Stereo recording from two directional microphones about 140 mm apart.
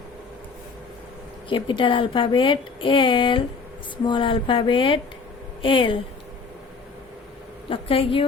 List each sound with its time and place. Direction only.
1.5 s a woman's voice: 35° left (ahead or behind)
7.7 s a woman's voice: 40° left (ahead or behind)